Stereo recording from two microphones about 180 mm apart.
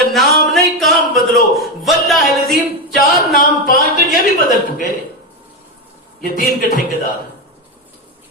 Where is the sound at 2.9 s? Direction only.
50° left (ahead or behind).